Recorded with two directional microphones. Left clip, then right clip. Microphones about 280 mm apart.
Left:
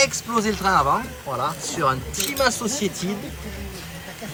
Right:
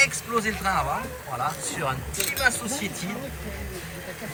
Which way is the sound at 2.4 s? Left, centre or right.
Centre.